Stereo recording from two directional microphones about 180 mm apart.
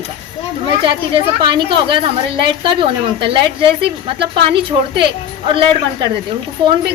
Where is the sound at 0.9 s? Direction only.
30° right (ahead or behind).